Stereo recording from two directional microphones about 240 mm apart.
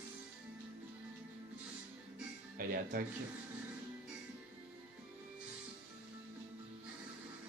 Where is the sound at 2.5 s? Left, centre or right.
Right.